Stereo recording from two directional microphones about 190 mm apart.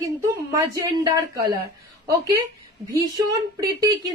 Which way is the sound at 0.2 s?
20° right (ahead or behind).